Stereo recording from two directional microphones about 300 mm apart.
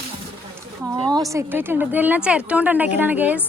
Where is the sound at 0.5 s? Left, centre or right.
Centre.